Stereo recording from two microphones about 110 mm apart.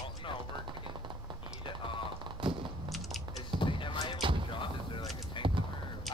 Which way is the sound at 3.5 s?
50° left (ahead or behind).